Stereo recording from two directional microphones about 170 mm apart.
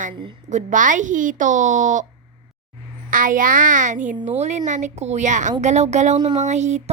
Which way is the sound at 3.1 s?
50° right (ahead or behind).